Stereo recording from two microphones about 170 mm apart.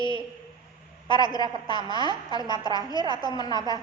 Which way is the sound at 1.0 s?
30° right (ahead or behind).